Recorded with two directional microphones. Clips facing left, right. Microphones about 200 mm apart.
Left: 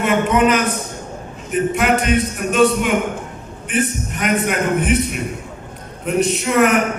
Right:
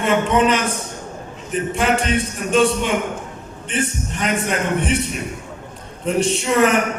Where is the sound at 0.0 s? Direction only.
30° right (ahead or behind).